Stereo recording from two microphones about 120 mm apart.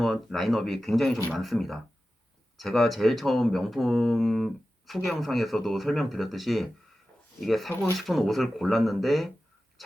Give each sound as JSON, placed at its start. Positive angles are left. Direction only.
{"t": 0.0, "sound": "speech", "side_deg": 0}